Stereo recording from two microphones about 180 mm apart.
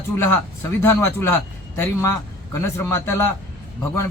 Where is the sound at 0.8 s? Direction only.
10° left (ahead or behind).